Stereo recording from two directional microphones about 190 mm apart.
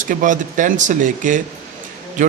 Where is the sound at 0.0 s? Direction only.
45° right (ahead or behind).